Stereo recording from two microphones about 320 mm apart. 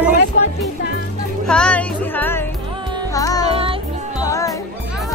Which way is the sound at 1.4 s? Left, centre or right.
Centre.